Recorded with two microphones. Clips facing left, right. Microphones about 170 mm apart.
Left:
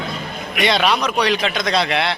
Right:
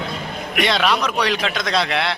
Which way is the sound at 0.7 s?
Centre (ahead or behind).